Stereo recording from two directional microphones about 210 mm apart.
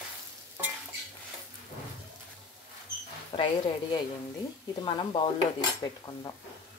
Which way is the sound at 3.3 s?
25° left (ahead or behind).